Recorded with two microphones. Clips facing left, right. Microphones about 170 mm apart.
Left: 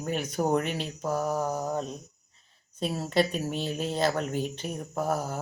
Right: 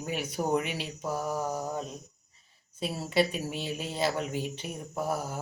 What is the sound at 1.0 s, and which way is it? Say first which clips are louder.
Speech: left 3 dB; 50° left (ahead or behind).